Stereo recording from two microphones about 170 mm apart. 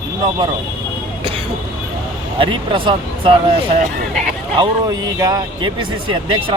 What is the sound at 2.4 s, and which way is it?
Speech, 30° right (ahead or behind).